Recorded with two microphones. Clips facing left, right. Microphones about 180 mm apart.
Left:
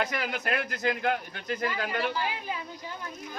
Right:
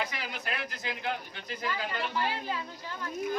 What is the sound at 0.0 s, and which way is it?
Speech, 55° left (ahead or behind).